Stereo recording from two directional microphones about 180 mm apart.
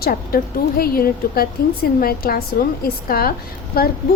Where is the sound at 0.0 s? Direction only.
55° left (ahead or behind).